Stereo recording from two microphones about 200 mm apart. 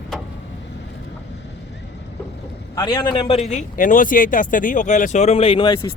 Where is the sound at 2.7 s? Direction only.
20° left (ahead or behind).